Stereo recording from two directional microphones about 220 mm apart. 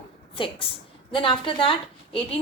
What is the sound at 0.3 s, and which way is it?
A woman's voice, 25° left (ahead or behind).